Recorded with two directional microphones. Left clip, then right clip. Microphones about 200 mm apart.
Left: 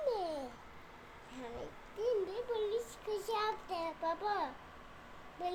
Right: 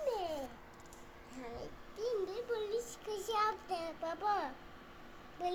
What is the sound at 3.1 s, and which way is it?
A child's voice, 10° left (ahead or behind).